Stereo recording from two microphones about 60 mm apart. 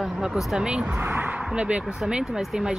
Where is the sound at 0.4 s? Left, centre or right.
Centre.